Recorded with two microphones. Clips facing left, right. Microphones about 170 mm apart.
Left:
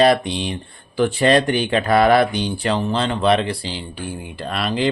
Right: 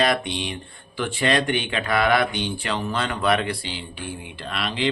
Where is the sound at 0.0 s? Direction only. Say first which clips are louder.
Left 7 dB; 35° left (ahead or behind).